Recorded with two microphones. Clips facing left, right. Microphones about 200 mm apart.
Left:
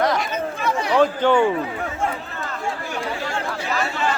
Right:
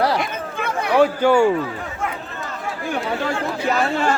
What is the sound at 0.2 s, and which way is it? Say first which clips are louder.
Chatter: left 1 dB; 55° right (ahead or behind).